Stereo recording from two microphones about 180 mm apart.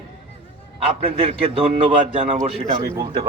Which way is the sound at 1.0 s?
30° right (ahead or behind).